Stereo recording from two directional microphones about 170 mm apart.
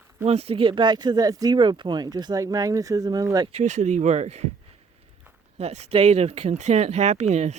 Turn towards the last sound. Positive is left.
turn(degrees=-40)  # may be behind; listen again after turning